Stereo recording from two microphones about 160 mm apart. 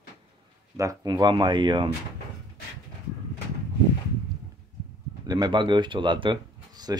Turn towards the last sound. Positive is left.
turn(degrees=-25)  # may be behind; listen again after turning